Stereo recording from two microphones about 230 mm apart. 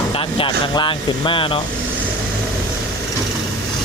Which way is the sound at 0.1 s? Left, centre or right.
Left.